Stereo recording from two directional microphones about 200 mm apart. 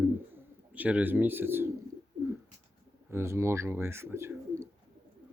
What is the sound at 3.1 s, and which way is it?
Speech, 15° right (ahead or behind).